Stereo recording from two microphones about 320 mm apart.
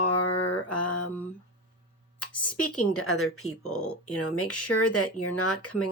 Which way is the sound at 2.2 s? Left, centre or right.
Left.